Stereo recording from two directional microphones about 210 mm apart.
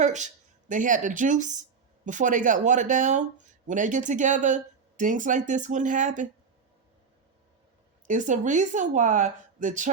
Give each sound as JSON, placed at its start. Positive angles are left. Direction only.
{"t": 0.0, "sound": "speech", "side_deg": -35}
{"t": 8.0, "sound": "speech", "side_deg": -35}